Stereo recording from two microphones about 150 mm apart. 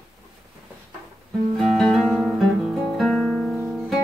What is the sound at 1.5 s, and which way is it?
Guitar, centre (ahead or behind).